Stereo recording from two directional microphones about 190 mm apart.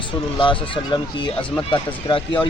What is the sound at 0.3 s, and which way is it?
Speech, 25° left (ahead or behind).